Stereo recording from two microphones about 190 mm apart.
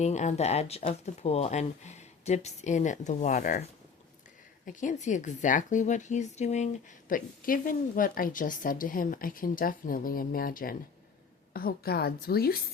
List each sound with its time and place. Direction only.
0.0 s speech: 35° left (ahead or behind)
4.6 s a woman's voice: 40° left (ahead or behind)